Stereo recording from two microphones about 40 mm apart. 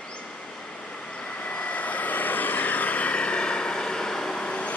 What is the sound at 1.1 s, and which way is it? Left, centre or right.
Vehicle, left.